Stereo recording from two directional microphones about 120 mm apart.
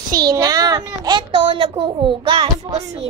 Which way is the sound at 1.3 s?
45° right (ahead or behind).